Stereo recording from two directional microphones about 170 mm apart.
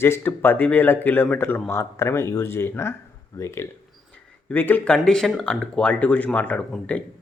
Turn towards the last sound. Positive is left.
turn(degrees=10)  # may be behind; listen again after turning